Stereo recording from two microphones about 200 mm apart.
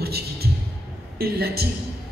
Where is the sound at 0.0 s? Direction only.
50° right (ahead or behind).